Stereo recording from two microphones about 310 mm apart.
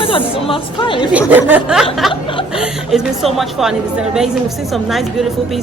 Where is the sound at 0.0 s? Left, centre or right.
Centre.